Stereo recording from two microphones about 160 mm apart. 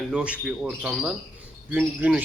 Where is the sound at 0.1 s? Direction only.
5° right (ahead or behind).